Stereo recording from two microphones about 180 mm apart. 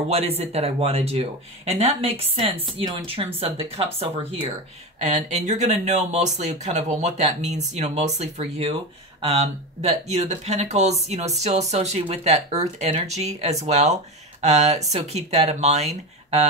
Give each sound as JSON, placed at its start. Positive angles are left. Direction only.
{"t": 0.1, "sound": "speech", "side_deg": -35}